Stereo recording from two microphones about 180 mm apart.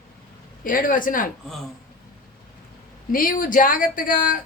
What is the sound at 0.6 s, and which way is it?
Speech, 50° left (ahead or behind).